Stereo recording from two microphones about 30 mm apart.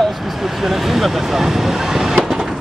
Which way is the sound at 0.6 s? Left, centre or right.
Centre.